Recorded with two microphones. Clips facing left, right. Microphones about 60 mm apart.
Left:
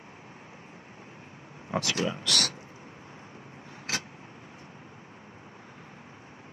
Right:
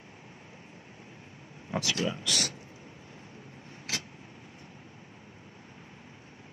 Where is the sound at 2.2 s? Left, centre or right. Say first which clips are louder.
Left 3 dB; left.